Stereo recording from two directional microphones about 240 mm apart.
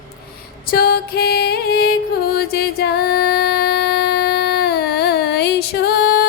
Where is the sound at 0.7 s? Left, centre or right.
Left.